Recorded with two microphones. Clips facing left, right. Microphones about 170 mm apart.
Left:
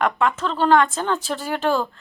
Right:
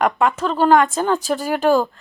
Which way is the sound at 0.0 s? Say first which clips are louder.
Right 3 dB; 10° right (ahead or behind).